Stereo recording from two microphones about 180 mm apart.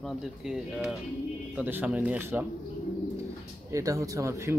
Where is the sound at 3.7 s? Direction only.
15° right (ahead or behind).